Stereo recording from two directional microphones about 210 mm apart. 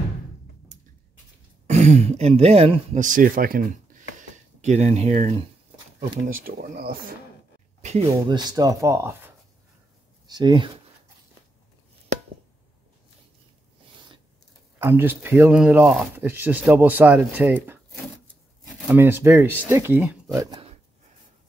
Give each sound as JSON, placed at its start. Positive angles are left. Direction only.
{"t": 1.7, "sound": "speech", "side_deg": -35}
{"t": 7.8, "sound": "a sound", "side_deg": -35}
{"t": 8.1, "sound": "speech", "side_deg": -20}
{"t": 14.8, "sound": "speech", "side_deg": -10}
{"t": 18.9, "sound": "speech", "side_deg": -10}
{"t": 20.4, "sound": "a sound", "side_deg": -20}